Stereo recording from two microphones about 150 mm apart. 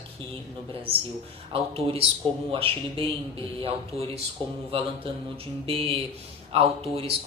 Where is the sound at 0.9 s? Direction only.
40° right (ahead or behind).